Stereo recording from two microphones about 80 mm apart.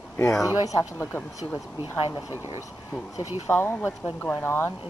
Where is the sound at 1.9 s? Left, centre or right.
Left.